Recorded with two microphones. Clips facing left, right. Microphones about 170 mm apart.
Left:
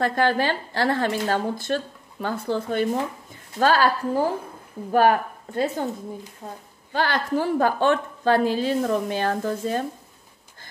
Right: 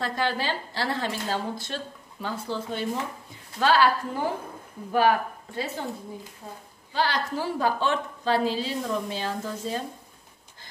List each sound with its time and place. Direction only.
0.0 s a woman's voice: 55° left (ahead or behind)
6.9 s a woman's voice: 55° left (ahead or behind)